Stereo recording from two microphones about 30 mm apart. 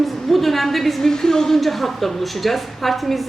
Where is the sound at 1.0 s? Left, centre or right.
Centre.